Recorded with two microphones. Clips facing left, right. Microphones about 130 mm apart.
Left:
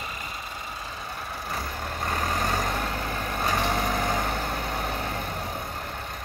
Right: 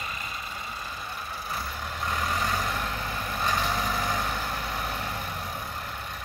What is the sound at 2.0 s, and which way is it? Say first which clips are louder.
Vehicle: left 1 dB; 45° left (ahead or behind).